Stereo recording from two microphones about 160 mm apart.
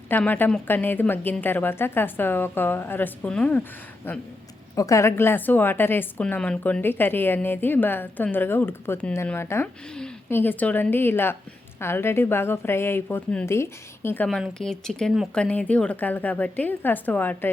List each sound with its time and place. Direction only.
0.1 s a woman's voice: 10° left (ahead or behind)
14.3 s a woman's voice: centre (ahead or behind)